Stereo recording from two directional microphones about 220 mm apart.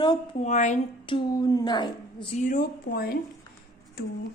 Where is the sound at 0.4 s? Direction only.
35° left (ahead or behind).